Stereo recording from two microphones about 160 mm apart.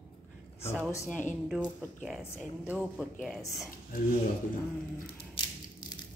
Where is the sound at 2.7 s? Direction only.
10° right (ahead or behind).